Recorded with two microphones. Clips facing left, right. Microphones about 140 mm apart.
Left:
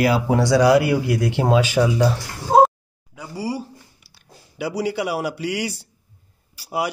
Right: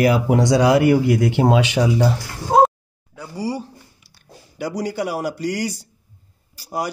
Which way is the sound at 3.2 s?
10° left (ahead or behind).